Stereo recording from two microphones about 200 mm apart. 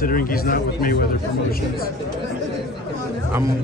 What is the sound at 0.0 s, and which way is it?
Speech, 45° left (ahead or behind).